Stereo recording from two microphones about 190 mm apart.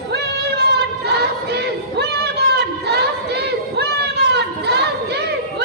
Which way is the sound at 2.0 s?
60° right (ahead or behind).